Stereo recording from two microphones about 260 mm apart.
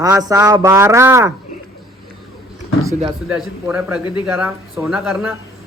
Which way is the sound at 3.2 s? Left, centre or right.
Centre.